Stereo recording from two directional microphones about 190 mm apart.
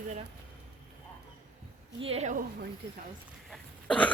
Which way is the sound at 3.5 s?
5° left (ahead or behind).